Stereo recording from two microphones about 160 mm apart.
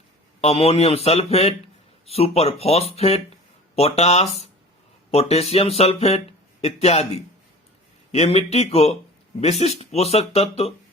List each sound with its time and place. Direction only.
0.4 s speech: 40° left (ahead or behind)
8.1 s speech: 40° left (ahead or behind)